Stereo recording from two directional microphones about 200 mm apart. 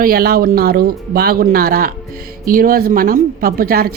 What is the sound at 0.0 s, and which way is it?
Speech, 50° right (ahead or behind).